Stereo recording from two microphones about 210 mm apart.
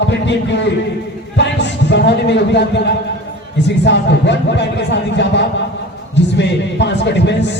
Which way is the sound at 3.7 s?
55° left (ahead or behind).